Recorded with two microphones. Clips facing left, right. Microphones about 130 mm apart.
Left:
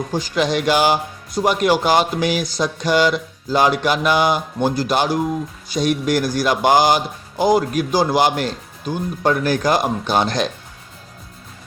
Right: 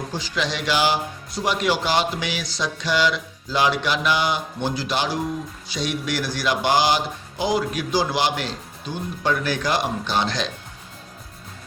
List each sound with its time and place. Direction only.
0.1 s speech: 50° left (ahead or behind)